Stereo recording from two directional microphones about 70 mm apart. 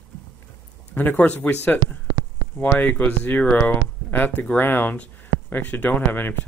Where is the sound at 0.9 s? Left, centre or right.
Left.